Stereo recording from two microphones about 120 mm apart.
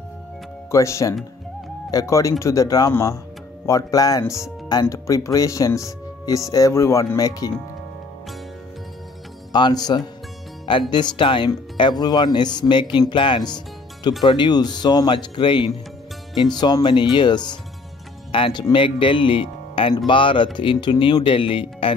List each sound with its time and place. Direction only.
0.7 s speech: 25° left (ahead or behind)
9.5 s speech: 40° left (ahead or behind)